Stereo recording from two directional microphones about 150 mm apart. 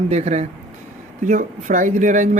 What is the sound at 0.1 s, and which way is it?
Speech, 50° right (ahead or behind).